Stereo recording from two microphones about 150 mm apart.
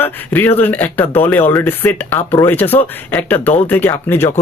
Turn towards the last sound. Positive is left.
turn(degrees=15)  # may be behind; listen again after turning